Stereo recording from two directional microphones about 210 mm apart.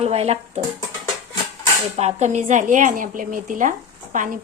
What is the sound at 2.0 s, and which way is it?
A woman's voice, 30° right (ahead or behind).